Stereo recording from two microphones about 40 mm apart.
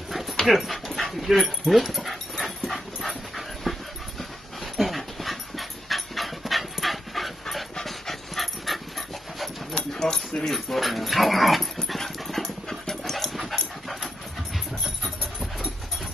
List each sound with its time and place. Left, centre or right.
0.1 s dog: centre
9.9 s a sound: centre
10.5 s dog: centre